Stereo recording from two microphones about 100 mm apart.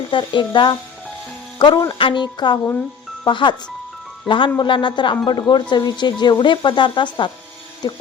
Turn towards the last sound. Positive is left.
turn(degrees=50)  # may be behind; listen again after turning